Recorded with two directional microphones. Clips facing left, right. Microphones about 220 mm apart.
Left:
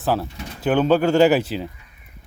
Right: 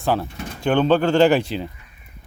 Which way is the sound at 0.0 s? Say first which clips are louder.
Even; 5° left (ahead or behind).